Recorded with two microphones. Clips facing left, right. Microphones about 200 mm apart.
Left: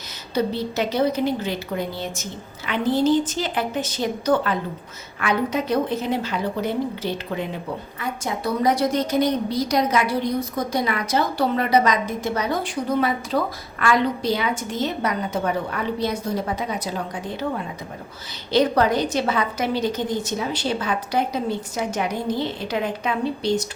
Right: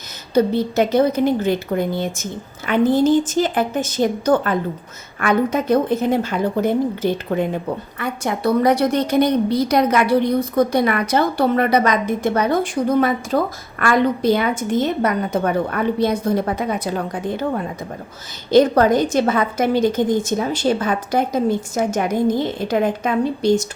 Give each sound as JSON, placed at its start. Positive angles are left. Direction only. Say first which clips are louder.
{"t": 0.3, "sound": "a woman's voice", "louder": "right 7 dB", "side_deg": -50}
{"t": 18.5, "sound": "a woman's voice", "louder": "right 6 dB", "side_deg": -50}